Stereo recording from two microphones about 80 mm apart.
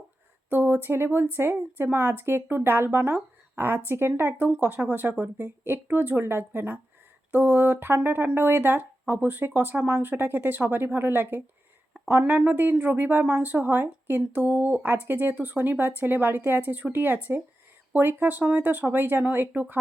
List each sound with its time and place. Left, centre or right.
0.5 s speech: right